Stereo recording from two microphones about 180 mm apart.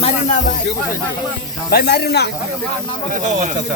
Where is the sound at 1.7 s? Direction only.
60° left (ahead or behind).